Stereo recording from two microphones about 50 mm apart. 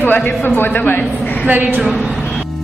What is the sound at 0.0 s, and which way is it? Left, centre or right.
A woman's voice, left.